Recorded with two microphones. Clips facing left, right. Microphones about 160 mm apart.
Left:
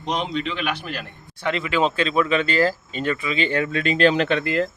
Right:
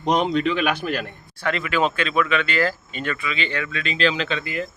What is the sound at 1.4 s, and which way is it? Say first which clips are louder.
Speech: left 1 dB; 20° left (ahead or behind).